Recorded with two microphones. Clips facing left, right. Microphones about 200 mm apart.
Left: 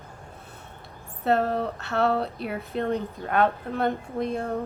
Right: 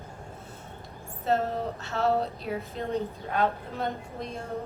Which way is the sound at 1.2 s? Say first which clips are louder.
Left 4 dB; 65° left (ahead or behind).